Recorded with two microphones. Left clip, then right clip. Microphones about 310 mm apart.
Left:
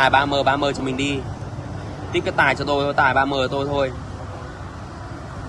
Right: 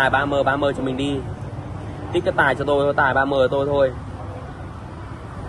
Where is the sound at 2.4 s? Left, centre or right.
Centre.